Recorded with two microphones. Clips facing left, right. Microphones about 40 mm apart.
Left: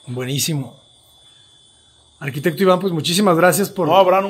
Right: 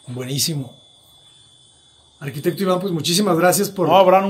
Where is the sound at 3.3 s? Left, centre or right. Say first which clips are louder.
Left 2 dB; left.